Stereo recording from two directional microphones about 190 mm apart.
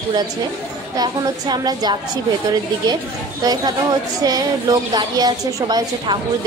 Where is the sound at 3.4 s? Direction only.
20° right (ahead or behind).